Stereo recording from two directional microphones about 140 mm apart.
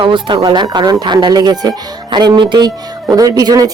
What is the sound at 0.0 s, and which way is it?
Speech, 35° right (ahead or behind).